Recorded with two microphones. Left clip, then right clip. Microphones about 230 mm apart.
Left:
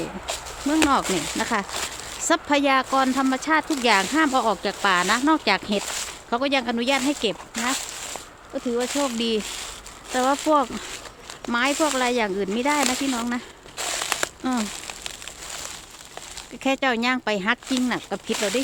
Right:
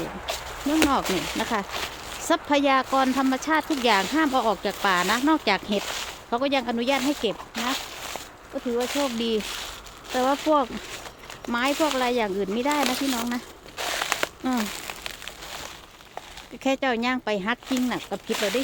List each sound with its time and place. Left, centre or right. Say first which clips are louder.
0.8 s speech: left 2 dB; centre
1.0 s speech: left 1 dB; centre
8.5 s speech: left 2 dB; left
8.9 s speech: left 1 dB; centre
9.1 s speech: left 1 dB; centre
13.8 s a sound: even; centre
14.4 s crumpling: left 1 dB; centre
16.6 s speech: left 2 dB; centre
18.3 s speech: left 1 dB; centre